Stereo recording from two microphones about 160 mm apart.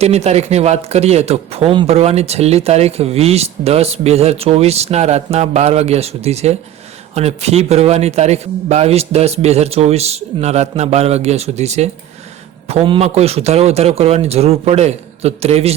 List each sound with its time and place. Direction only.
0.0 s speech: 40° right (ahead or behind)